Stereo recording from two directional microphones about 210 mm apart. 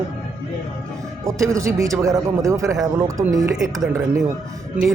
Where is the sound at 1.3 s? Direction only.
15° right (ahead or behind).